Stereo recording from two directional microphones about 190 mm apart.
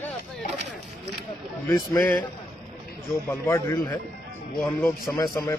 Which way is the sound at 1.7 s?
5° left (ahead or behind).